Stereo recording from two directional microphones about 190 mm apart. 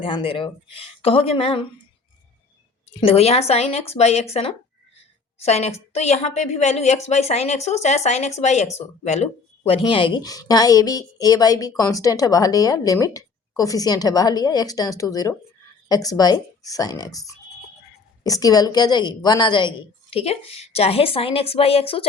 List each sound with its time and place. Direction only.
0.0 s a woman's voice: 30° left (ahead or behind)
3.0 s a woman's voice: 30° left (ahead or behind)